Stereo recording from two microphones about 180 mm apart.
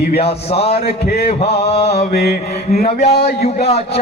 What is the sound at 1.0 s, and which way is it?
Mantra, 65° left (ahead or behind).